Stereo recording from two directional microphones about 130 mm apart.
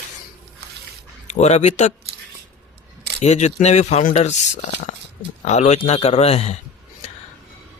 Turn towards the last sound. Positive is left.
turn(degrees=55)  # may be behind; listen again after turning